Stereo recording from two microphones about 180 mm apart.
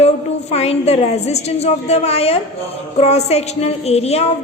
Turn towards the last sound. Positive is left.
turn(degrees=35)  # may be behind; listen again after turning